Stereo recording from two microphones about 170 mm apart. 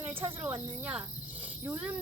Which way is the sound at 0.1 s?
30° right (ahead or behind).